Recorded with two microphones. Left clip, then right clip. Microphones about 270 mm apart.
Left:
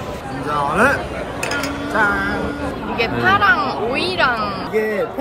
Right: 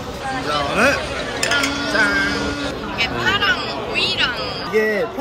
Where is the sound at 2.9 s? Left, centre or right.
Centre.